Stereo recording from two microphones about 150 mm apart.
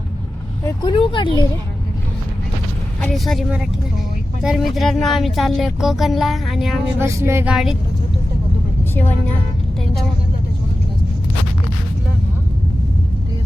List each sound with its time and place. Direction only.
0.8 s speech: 30° left (ahead or behind)
3.0 s speech: centre (ahead or behind)
7.0 s a sound: 20° right (ahead or behind)
7.5 s speech: 5° right (ahead or behind)